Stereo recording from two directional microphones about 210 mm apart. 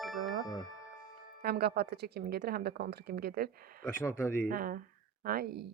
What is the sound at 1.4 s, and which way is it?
Speech, 50° right (ahead or behind).